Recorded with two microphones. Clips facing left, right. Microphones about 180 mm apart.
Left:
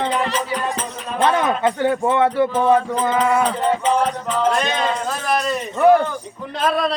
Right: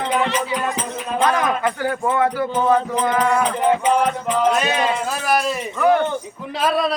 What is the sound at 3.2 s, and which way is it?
Music, 5° left (ahead or behind).